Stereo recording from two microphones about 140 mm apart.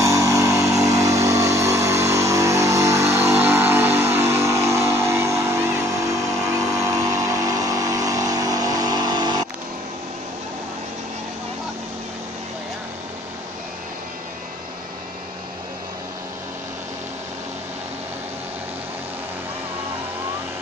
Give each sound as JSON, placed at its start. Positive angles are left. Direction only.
{"t": 0.0, "sound": "vehicle", "side_deg": -20}